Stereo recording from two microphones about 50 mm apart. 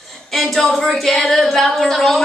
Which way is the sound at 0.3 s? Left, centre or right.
Centre.